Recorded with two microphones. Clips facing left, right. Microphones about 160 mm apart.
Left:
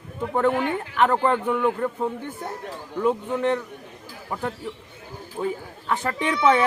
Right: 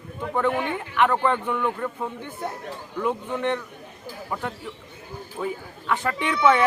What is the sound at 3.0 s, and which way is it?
Speech, 35° left (ahead or behind).